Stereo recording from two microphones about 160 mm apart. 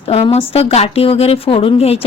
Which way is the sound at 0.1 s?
40° left (ahead or behind).